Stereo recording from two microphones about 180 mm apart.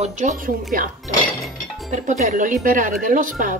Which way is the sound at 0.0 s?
40° right (ahead or behind).